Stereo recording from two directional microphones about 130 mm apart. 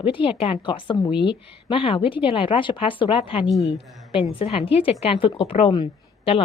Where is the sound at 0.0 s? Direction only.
40° left (ahead or behind).